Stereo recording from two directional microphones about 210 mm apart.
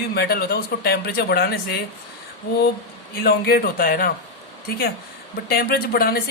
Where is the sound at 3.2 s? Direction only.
50° left (ahead or behind).